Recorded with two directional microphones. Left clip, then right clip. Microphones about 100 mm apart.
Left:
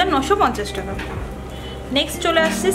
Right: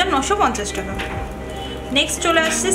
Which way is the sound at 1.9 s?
20° left (ahead or behind).